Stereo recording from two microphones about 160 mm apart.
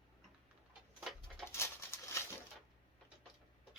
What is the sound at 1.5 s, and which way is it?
Bird, 15° left (ahead or behind).